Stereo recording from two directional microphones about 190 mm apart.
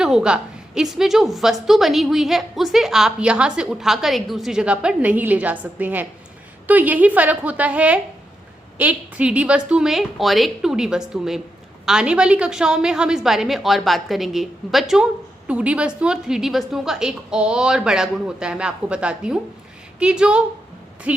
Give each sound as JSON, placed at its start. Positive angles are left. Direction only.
{"t": 0.0, "sound": "a woman's voice", "side_deg": -5}